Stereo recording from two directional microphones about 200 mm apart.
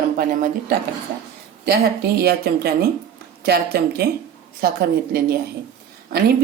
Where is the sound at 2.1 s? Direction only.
50° right (ahead or behind).